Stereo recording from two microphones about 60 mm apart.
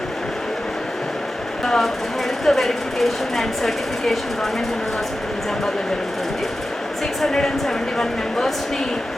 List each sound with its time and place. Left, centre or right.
1.6 s speech: centre
7.2 s speech: centre